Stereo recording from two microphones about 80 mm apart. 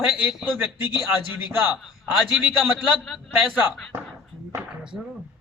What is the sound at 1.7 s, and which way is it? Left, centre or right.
A man's voice, centre.